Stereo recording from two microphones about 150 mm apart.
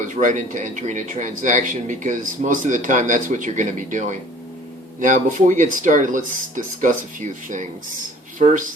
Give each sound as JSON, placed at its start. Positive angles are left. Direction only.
{"t": 0.2, "sound": "speech", "side_deg": -55}